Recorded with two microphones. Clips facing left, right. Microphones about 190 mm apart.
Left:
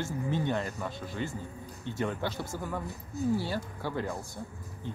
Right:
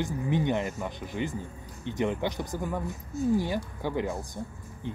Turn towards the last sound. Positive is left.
turn(degrees=-15)  # may be behind; listen again after turning